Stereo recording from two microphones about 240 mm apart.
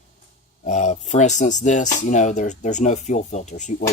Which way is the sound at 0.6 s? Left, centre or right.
Left.